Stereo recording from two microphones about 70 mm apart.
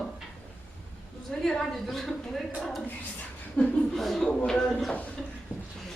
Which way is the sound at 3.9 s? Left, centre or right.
Centre.